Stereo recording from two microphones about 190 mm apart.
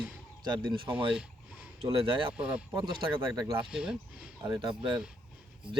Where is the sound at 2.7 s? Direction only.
25° right (ahead or behind).